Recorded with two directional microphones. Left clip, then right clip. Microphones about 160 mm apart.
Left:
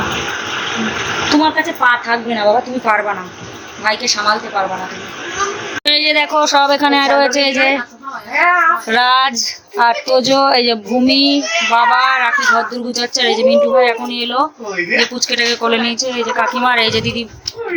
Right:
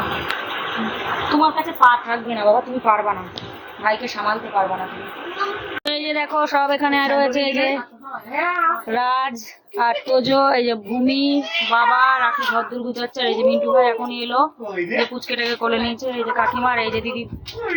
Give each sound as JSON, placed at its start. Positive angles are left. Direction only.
{"t": 1.3, "sound": "speech", "side_deg": 55}
{"t": 2.8, "sound": "a woman's voice", "side_deg": 35}
{"t": 3.8, "sound": "speech", "side_deg": 10}
{"t": 5.8, "sound": "speech", "side_deg": 20}
{"t": 8.9, "sound": "speech", "side_deg": 15}